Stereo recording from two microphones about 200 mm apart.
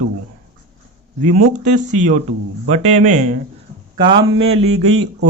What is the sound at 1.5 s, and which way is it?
Speech, 35° right (ahead or behind).